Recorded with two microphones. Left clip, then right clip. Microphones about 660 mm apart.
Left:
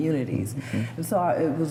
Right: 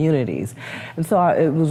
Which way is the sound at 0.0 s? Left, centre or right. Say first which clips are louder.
Right 6 dB; right.